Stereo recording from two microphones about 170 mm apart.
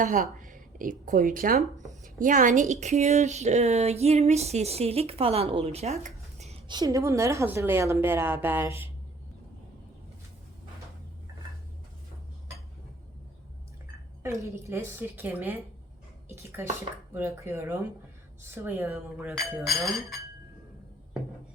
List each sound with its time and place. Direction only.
0.0 s speech: 50° right (ahead or behind)
6.7 s a woman's voice: 25° right (ahead or behind)
14.2 s a woman's voice: 15° right (ahead or behind); by 20.1 s centre (ahead or behind)